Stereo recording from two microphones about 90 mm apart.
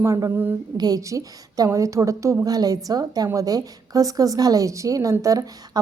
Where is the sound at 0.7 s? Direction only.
45° right (ahead or behind).